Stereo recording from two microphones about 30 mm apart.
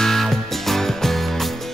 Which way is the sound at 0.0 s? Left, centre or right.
Centre.